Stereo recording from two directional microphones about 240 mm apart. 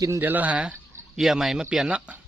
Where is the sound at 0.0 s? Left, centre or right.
Centre.